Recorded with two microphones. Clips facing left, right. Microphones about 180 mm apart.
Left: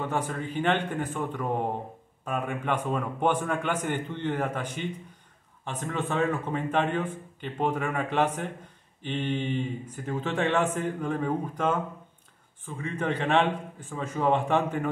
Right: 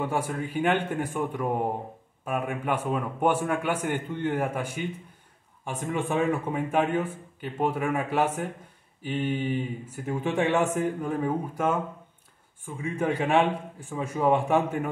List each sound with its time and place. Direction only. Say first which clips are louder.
0.0 s a man's voice: right 2 dB; 10° right (ahead or behind)